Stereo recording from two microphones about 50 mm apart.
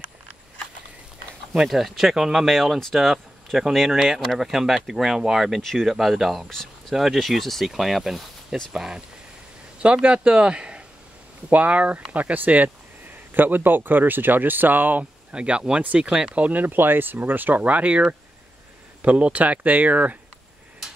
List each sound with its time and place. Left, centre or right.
1.7 s speech: centre
5.6 s speech: centre
5.9 s speech: centre
6.5 s a sound: centre
7.2 s speech: centre
10.0 s speech: right
13.3 s speech: right
15.3 s speech: right
16.3 s speech: right
19.0 s speech: right